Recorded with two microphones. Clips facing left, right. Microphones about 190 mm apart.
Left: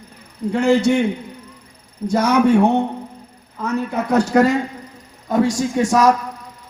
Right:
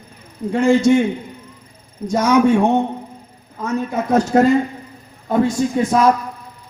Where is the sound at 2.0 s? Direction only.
60° left (ahead or behind).